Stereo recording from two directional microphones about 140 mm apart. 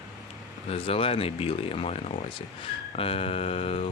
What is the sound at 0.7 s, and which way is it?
Speech, 40° left (ahead or behind).